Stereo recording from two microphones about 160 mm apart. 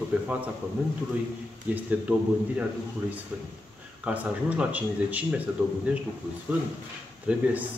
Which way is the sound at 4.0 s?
10° right (ahead or behind).